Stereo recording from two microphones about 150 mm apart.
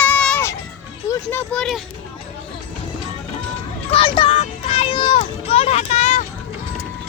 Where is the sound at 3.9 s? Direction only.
35° left (ahead or behind).